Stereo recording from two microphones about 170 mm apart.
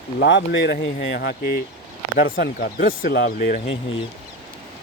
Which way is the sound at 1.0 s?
65° left (ahead or behind).